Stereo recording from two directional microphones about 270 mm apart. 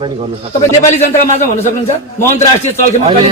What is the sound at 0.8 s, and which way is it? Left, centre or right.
Speech, left.